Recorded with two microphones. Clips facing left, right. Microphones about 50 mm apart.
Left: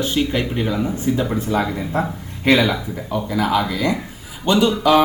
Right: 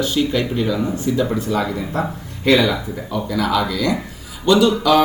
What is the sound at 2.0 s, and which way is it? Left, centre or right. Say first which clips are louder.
A man's voice: left 1 dB; left.